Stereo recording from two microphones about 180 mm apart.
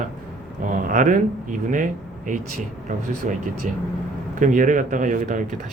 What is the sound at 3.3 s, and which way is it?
Speech, 45° right (ahead or behind).